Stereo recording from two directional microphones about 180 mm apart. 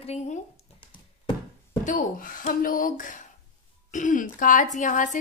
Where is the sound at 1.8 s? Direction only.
50° left (ahead or behind).